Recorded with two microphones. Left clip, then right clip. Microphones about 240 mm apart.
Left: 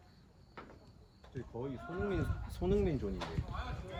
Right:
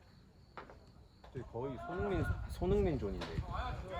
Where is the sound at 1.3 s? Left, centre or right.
Right.